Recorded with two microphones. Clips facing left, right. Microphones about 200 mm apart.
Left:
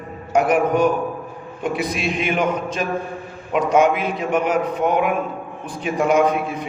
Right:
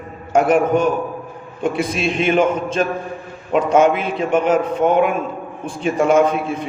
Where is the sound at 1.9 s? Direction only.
25° right (ahead or behind).